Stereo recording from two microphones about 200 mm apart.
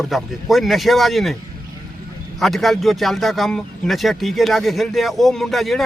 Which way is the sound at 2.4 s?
Centre (ahead or behind).